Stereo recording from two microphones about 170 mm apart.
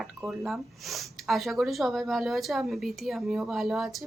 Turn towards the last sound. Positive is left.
turn(degrees=0)  # may be behind; listen again after turning